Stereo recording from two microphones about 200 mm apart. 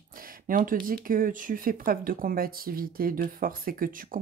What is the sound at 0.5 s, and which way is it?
Speech, 45° right (ahead or behind).